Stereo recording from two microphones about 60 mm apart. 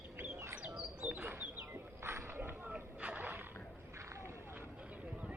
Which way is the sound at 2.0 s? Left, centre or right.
Right.